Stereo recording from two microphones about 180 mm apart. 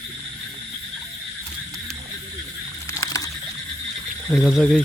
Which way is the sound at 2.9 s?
20° left (ahead or behind).